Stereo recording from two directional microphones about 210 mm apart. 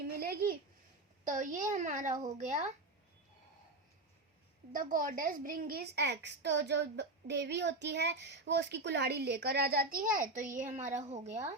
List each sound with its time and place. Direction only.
0.2 s a sound: 45° right (ahead or behind)
1.2 s a child's voice: 40° right (ahead or behind)
4.7 s a woman's voice: 40° right (ahead or behind)